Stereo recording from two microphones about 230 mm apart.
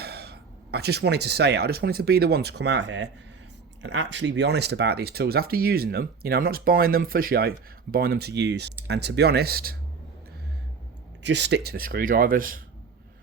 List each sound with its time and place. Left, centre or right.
0.0 s speech: right
11.2 s speech: right